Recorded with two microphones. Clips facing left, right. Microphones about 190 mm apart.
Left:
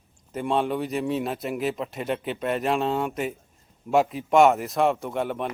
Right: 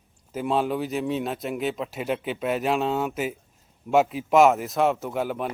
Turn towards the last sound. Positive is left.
turn(degrees=-5)  # may be behind; listen again after turning